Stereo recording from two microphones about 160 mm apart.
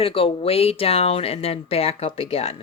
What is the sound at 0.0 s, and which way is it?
Speech, 35° left (ahead or behind).